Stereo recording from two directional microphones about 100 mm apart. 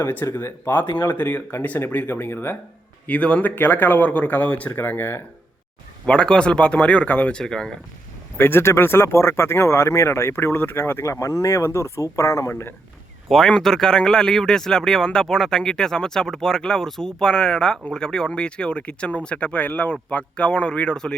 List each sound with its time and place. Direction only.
0.0 s speech: 20° left (ahead or behind)
6.1 s speech: 10° left (ahead or behind)
8.4 s speech: 20° left (ahead or behind)
13.2 s speech: 5° left (ahead or behind)